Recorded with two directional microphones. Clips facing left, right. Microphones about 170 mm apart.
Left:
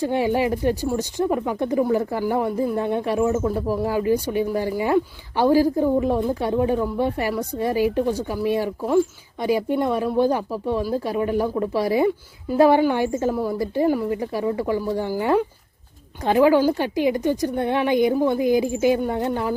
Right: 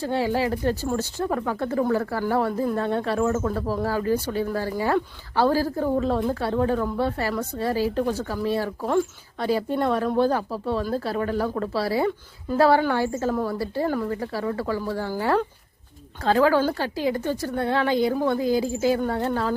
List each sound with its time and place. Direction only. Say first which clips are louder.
0.0 s a woman's voice: left 3 dB; 15° left (ahead or behind)